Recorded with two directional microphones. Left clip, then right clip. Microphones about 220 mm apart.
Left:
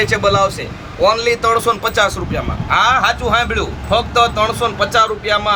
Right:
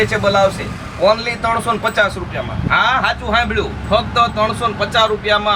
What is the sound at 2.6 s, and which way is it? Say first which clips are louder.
Speech: left 2 dB; 45° left (ahead or behind).